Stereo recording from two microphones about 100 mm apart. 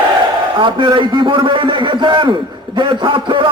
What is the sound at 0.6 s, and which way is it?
A man's voice, 55° right (ahead or behind).